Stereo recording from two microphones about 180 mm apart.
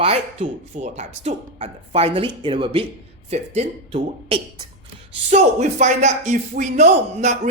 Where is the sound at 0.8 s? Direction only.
40° right (ahead or behind).